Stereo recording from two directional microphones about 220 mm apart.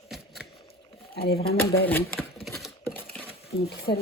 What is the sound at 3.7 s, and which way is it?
Speech, 45° left (ahead or behind).